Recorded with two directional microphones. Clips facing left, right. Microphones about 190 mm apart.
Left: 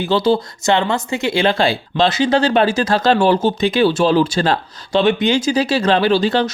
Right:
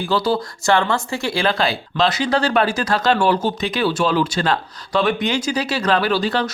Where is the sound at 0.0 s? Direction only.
25° left (ahead or behind).